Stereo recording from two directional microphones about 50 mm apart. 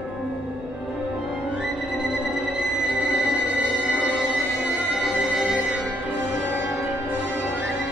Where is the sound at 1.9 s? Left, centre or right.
Right.